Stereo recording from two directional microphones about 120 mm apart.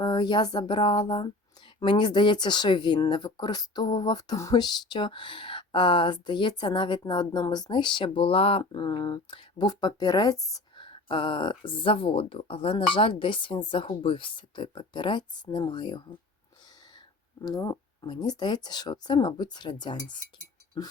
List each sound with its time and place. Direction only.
0.0 s speech: 40° left (ahead or behind)
8.7 s speech: 40° left (ahead or behind)
10.8 s speech: 45° left (ahead or behind)
17.4 s speech: 30° left (ahead or behind)